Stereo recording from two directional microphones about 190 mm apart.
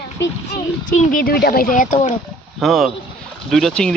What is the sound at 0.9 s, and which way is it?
Speech, 45° left (ahead or behind).